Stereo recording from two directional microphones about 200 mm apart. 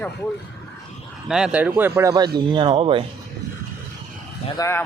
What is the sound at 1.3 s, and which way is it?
Speech, 5° right (ahead or behind).